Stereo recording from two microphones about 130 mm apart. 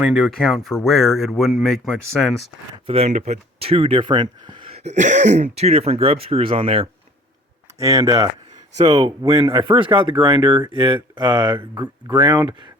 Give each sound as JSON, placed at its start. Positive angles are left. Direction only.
{"t": 0.0, "sound": "speech", "side_deg": -5}
{"t": 2.8, "sound": "speech", "side_deg": -50}
{"t": 3.2, "sound": "speech", "side_deg": -60}
{"t": 4.7, "sound": "speech", "side_deg": -60}
{"t": 7.8, "sound": "speech", "side_deg": -25}
{"t": 8.8, "sound": "speech", "side_deg": -50}